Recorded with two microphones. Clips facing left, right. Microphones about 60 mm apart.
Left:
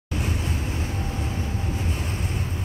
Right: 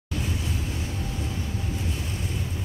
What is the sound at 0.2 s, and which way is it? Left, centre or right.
Vehicle, left.